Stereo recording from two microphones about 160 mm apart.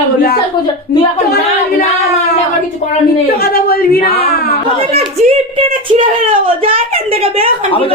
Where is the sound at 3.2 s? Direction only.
70° left (ahead or behind).